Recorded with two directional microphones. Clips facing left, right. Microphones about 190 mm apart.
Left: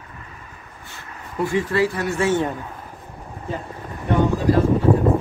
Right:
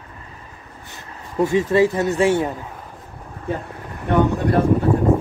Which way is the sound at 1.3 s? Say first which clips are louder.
Right 4 dB; 20° right (ahead or behind).